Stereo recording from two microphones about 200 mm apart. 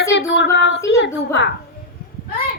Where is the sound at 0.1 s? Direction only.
60° left (ahead or behind).